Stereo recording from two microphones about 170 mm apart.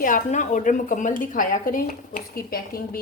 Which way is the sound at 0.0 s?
50° left (ahead or behind).